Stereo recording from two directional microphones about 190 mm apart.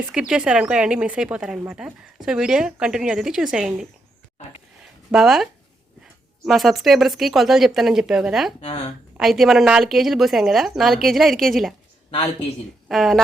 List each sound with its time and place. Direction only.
0.1 s a woman's voice: 5° right (ahead or behind)
5.1 s a woman's voice: centre (ahead or behind)
8.6 s a woman's voice: 30° left (ahead or behind)
9.1 s a woman's voice: centre (ahead or behind)
12.9 s a woman's voice: centre (ahead or behind)